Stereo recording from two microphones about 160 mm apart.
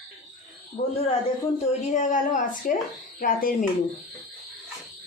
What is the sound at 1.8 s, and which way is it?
Speech, 50° left (ahead or behind).